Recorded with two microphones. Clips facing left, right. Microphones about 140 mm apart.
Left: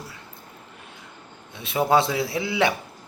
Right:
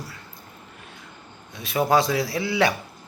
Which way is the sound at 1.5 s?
25° left (ahead or behind).